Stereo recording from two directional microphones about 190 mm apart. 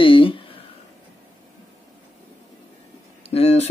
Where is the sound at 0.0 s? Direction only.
25° left (ahead or behind).